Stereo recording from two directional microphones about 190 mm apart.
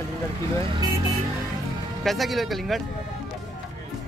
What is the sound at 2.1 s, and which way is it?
Speech, centre (ahead or behind).